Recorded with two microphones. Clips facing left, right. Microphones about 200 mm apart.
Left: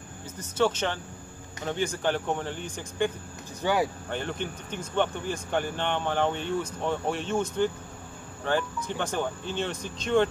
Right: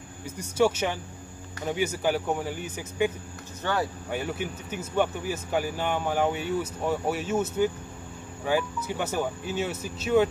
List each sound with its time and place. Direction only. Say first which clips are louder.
0.4 s speech: right 2 dB; 10° right (ahead or behind)
3.6 s speech: left 3 dB; 10° left (ahead or behind)
4.1 s speech: right 1 dB; 10° right (ahead or behind)
8.5 s speech: right 1 dB; 10° right (ahead or behind)